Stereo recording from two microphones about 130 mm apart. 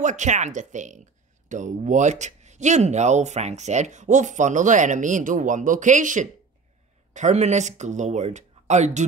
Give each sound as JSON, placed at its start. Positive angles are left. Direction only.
{"t": 0.0, "sound": "speech", "side_deg": -65}
{"t": 7.2, "sound": "speech", "side_deg": -65}